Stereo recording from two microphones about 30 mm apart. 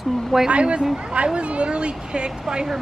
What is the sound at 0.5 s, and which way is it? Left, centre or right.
A child's voice, right.